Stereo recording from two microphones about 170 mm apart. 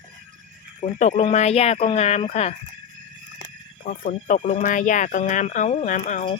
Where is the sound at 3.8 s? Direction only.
45° left (ahead or behind).